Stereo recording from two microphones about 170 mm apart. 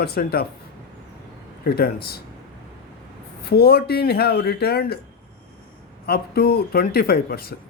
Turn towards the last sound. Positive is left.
turn(degrees=65)  # may be behind; listen again after turning